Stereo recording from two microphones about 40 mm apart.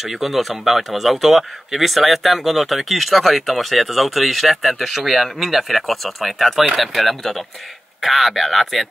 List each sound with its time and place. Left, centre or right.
0.0 s speech: centre